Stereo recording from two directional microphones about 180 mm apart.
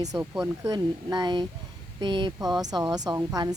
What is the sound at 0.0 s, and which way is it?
Speech, 15° right (ahead or behind).